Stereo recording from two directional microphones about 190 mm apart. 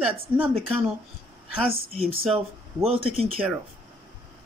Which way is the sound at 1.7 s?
30° right (ahead or behind).